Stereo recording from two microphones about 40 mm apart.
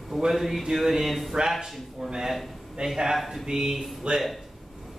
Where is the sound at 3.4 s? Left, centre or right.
Centre.